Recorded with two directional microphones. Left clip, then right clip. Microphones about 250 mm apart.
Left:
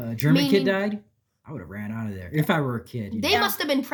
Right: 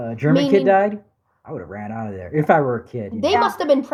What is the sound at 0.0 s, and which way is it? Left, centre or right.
A woman's voice, left.